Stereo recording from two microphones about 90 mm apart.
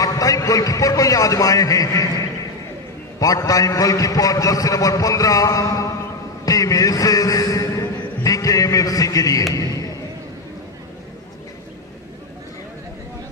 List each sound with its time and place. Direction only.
0.0 s a man's voice: 40° left (ahead or behind)